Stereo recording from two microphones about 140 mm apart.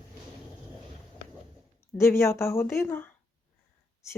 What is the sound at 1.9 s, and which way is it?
Speech, 20° left (ahead or behind).